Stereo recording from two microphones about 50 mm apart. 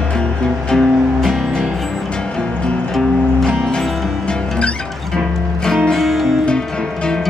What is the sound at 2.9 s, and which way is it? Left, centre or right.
Music, centre.